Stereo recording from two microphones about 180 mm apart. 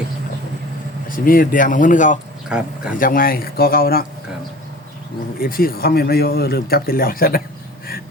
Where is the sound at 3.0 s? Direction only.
50° left (ahead or behind).